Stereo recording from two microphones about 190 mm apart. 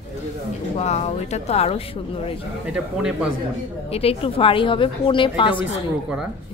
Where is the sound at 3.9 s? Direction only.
30° left (ahead or behind).